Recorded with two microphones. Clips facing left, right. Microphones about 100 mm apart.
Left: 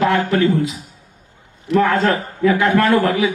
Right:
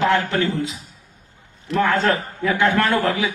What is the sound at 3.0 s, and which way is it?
Speech, 25° right (ahead or behind).